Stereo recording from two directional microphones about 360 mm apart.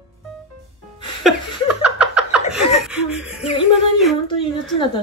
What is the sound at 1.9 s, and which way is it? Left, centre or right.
Vehicle, centre.